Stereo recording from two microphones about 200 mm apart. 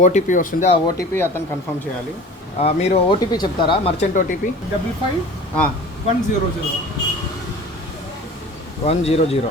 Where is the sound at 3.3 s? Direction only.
20° left (ahead or behind).